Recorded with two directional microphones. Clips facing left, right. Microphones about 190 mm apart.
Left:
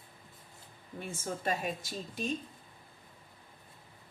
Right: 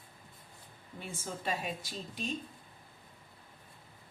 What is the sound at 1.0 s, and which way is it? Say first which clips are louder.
A woman's voice: left 3 dB; 50° left (ahead or behind).